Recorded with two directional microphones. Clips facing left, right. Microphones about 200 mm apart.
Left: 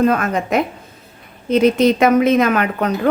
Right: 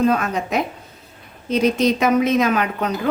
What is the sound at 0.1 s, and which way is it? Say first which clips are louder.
Speech: left 3 dB; 55° left (ahead or behind).